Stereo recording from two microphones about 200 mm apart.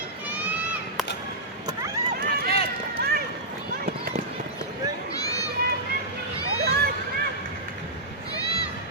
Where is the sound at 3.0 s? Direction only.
50° right (ahead or behind).